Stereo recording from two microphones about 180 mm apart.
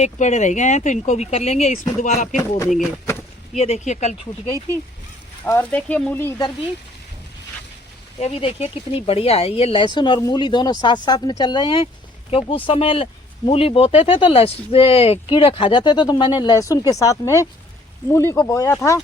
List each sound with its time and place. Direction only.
0.0 s speech: 40° left (ahead or behind)
3.6 s speech: 40° left (ahead or behind)
5.5 s speech: 10° left (ahead or behind)
8.2 s speech: 35° left (ahead or behind); by 18.8 s 15° left (ahead or behind)